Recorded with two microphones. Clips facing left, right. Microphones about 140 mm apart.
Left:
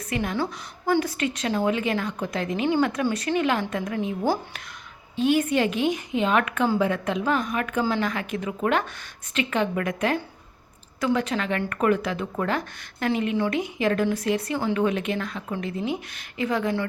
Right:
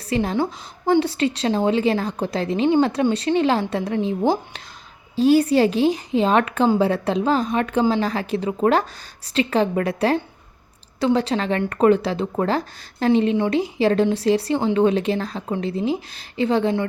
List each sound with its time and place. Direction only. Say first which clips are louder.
0.1 s a woman's voice: right 6 dB; 30° right (ahead or behind)
5.1 s speech: right 6 dB; 35° right (ahead or behind)